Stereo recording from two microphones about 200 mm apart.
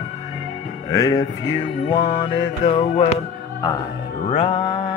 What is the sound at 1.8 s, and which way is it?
Mantra, 20° left (ahead or behind).